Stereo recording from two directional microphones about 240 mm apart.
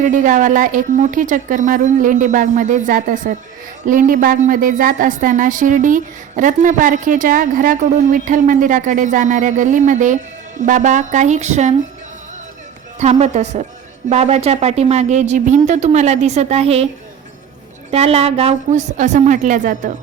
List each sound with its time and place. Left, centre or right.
0.0 s a woman's voice: right
13.0 s speech: right
17.9 s speech: right